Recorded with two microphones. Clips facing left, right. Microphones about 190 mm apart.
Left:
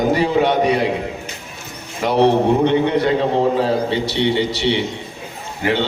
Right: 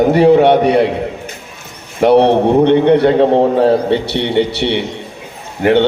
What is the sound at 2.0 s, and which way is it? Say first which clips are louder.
A man's voice: right 5 dB; 60° right (ahead or behind).